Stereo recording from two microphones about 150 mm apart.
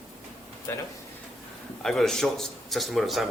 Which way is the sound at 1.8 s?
5° left (ahead or behind).